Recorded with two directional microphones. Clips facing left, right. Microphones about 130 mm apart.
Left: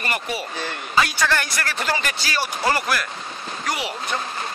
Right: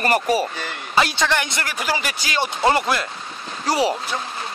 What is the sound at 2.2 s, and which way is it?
Speech, 20° right (ahead or behind).